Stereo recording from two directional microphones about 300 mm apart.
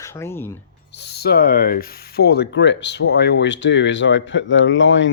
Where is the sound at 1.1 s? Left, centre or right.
Left.